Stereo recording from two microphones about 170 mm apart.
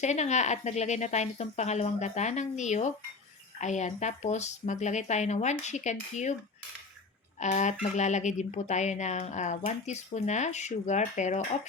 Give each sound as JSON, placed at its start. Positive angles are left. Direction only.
{"t": 0.0, "sound": "speech", "side_deg": 40}
{"t": 7.3, "sound": "speech", "side_deg": 45}